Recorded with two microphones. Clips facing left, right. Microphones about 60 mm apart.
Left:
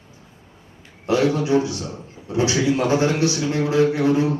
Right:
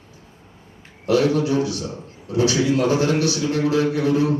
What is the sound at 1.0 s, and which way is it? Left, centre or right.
A man's voice, left.